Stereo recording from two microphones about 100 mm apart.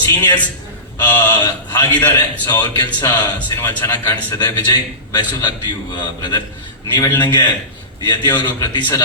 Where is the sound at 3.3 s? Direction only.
20° left (ahead or behind).